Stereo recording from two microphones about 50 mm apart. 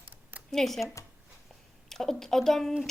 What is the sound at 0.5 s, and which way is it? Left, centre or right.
Speech, centre.